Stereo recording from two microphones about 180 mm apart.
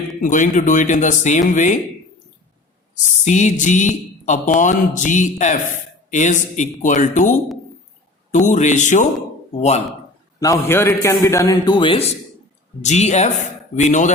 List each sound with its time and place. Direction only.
0.2 s speech: 45° left (ahead or behind)
3.2 s speech: 40° left (ahead or behind)
10.4 s a man's voice: 15° left (ahead or behind); by 14.1 s 40° left (ahead or behind)